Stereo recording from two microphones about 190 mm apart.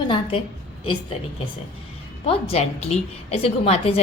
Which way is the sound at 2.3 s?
30° left (ahead or behind).